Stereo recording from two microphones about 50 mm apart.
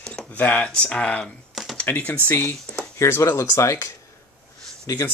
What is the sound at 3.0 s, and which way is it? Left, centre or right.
Speech, left.